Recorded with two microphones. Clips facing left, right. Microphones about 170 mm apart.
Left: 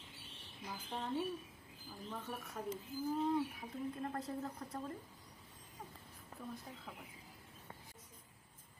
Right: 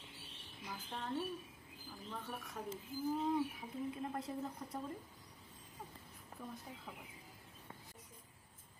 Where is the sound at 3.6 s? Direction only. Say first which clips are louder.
Even; 10° right (ahead or behind).